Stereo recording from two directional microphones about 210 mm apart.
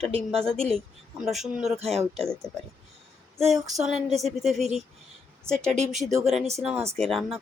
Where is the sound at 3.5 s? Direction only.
Centre (ahead or behind).